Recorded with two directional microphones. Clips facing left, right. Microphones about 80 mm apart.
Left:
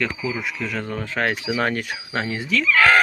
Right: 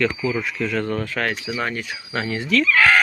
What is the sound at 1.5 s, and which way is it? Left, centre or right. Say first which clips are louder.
Speech: left 3 dB; left.